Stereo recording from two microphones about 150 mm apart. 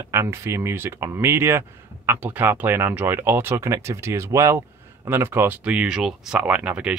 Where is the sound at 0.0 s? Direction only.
20° right (ahead or behind).